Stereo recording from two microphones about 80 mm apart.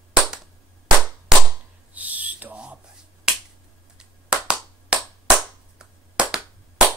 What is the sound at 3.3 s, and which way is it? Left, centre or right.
Finger snapping, centre.